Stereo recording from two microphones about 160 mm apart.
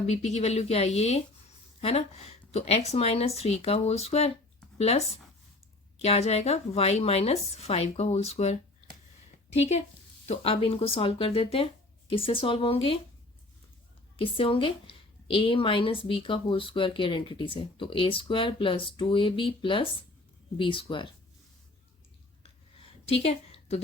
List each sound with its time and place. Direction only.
0.1 s speech: 45° left (ahead or behind)
9.6 s a woman's voice: 45° left (ahead or behind)
14.2 s speech: 35° left (ahead or behind)
22.8 s a sound: 40° left (ahead or behind)